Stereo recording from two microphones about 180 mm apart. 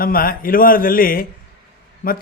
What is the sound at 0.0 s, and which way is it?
Speech, 55° left (ahead or behind).